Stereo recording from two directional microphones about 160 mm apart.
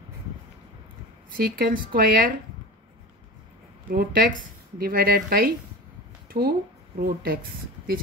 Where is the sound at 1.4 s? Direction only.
65° right (ahead or behind).